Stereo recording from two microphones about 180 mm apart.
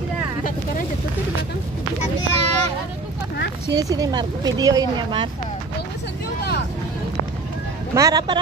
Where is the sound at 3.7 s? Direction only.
20° right (ahead or behind).